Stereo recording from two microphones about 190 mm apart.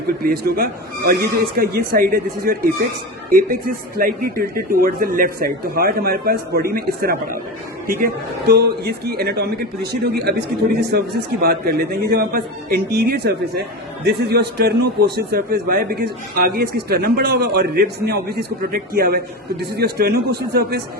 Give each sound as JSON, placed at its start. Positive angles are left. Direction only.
{"t": 0.2, "sound": "a man's voice", "side_deg": -50}